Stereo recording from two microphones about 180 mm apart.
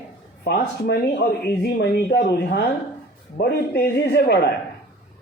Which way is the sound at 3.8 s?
60° left (ahead or behind).